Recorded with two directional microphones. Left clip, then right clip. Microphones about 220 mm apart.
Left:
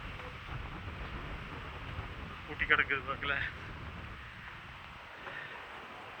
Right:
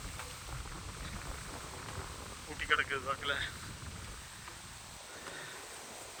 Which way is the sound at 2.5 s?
15° right (ahead or behind).